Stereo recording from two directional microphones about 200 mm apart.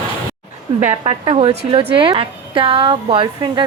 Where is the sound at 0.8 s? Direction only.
35° right (ahead or behind).